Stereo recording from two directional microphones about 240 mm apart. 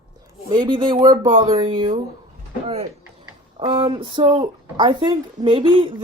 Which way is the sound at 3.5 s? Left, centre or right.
Centre.